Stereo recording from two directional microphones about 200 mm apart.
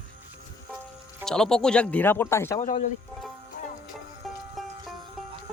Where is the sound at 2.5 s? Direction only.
35° left (ahead or behind).